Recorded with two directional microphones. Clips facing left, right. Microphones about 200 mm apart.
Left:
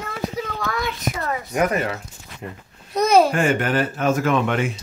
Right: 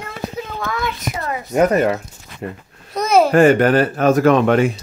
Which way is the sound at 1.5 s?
35° right (ahead or behind).